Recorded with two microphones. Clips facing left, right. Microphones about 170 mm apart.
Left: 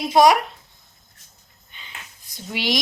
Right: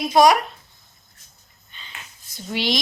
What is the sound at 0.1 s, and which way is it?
Speech, 20° left (ahead or behind).